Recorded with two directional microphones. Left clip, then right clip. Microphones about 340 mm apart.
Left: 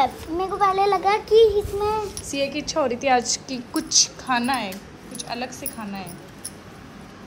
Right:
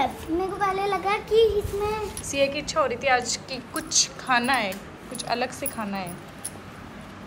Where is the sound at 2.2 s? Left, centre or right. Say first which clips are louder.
Right 1 dB; centre.